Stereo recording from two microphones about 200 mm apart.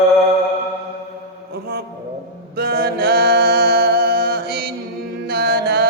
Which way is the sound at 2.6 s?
50° right (ahead or behind).